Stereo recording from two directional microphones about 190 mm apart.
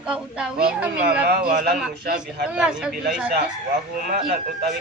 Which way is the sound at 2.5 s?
5° right (ahead or behind).